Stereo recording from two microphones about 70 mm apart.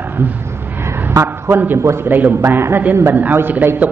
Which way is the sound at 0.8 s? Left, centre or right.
Right.